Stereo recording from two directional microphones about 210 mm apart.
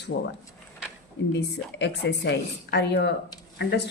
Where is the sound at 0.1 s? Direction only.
60° left (ahead or behind).